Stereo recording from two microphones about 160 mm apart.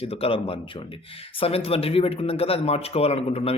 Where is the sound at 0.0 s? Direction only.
35° left (ahead or behind).